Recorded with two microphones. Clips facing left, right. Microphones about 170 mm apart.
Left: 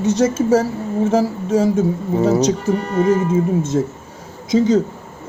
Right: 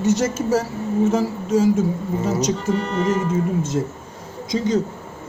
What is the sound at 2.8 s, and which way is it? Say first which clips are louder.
Speech: left 5 dB; 10° left (ahead or behind).